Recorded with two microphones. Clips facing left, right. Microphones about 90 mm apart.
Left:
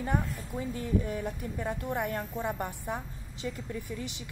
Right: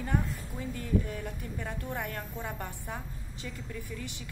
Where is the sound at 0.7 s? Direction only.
20° left (ahead or behind).